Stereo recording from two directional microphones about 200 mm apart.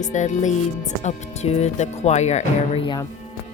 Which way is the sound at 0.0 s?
35° left (ahead or behind).